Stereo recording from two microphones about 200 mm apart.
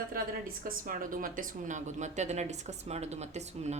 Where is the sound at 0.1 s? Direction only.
45° right (ahead or behind).